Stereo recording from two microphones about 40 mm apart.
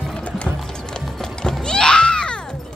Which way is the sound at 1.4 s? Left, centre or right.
Centre.